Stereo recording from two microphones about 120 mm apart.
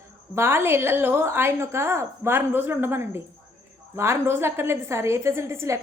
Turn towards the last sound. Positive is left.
turn(degrees=-25)  # may be behind; listen again after turning